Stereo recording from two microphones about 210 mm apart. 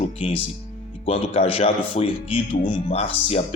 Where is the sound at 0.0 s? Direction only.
25° left (ahead or behind).